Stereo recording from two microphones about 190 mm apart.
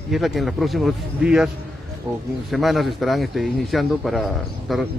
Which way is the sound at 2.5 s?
Centre (ahead or behind).